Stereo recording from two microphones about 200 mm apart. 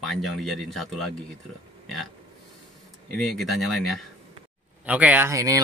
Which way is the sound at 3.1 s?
Centre (ahead or behind).